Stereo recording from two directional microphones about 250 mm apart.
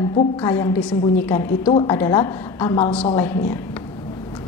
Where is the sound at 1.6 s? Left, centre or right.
Centre.